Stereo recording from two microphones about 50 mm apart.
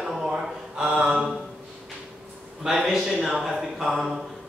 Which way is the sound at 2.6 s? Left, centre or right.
Centre.